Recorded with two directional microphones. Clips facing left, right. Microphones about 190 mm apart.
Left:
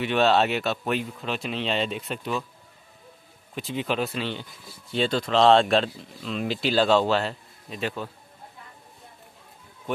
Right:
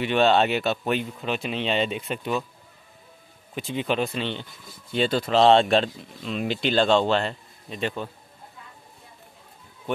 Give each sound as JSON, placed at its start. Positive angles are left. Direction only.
{"t": 0.0, "sound": "speech", "side_deg": 0}
{"t": 3.5, "sound": "speech", "side_deg": 0}